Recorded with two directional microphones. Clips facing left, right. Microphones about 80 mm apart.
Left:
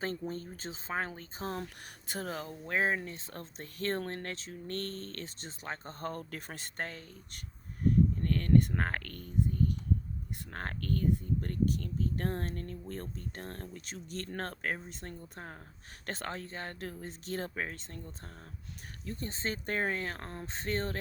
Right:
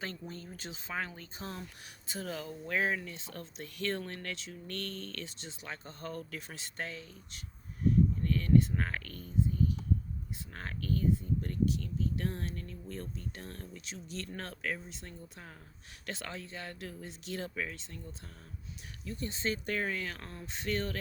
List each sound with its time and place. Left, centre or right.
0.0 s speech: left
19.0 s speech: left